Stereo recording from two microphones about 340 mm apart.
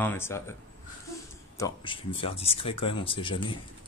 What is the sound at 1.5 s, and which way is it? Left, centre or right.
Speech, centre.